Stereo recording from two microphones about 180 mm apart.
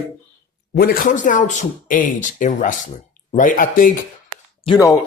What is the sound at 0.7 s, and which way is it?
Speech, 55° left (ahead or behind).